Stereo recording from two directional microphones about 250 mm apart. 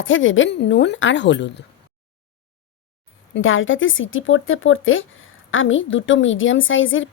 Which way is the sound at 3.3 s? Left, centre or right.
Left.